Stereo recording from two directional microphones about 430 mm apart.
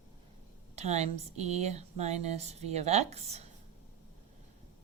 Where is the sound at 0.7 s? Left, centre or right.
Centre.